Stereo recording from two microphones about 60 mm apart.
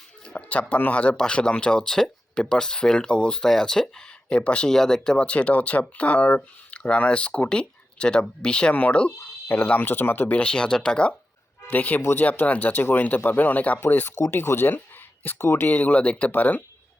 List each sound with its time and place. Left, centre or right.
0.3 s a sound: left
0.7 s speech: left
9.5 s speech: left
10.4 s speech: centre
11.7 s speech: left
14.2 s speech: left